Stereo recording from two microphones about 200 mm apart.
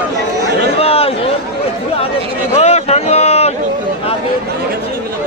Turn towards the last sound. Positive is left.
turn(degrees=30)  # may be behind; listen again after turning